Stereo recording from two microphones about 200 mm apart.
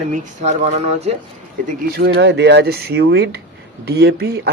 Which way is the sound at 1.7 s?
50° right (ahead or behind).